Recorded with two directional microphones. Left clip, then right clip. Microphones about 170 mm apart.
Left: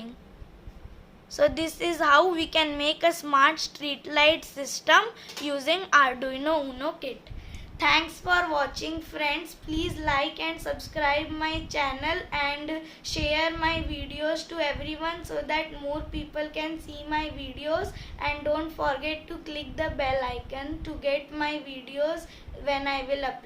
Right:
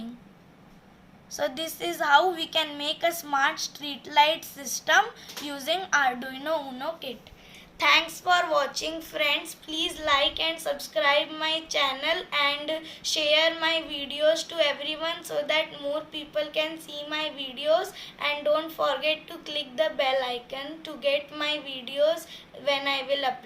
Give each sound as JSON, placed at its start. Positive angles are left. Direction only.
{"t": 1.3, "sound": "a woman's voice", "side_deg": 40}
{"t": 7.8, "sound": "a woman's voice", "side_deg": 15}